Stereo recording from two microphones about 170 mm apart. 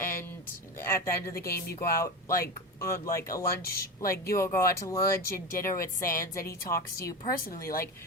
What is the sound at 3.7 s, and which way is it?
Speech, 60° left (ahead or behind).